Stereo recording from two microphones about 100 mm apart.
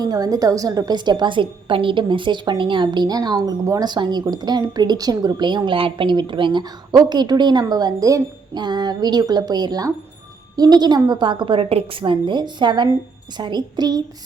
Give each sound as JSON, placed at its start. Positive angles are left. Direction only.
{"t": 0.0, "sound": "a woman's voice", "side_deg": -40}